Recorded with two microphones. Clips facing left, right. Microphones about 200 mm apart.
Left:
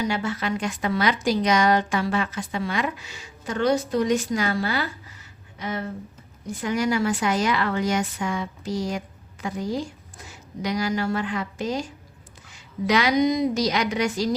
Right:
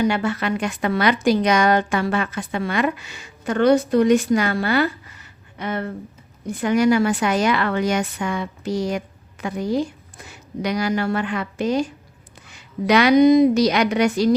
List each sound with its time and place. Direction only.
0.0 s a woman's voice: 60° right (ahead or behind)